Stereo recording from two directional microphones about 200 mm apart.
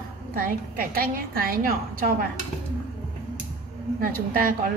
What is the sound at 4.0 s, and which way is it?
Speech, 45° right (ahead or behind).